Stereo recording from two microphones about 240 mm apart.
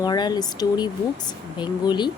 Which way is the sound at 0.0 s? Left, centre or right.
Centre.